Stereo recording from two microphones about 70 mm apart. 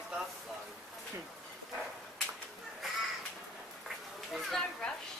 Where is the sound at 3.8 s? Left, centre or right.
Centre.